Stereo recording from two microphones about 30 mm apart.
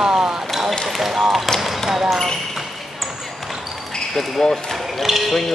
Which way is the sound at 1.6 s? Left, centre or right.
Centre.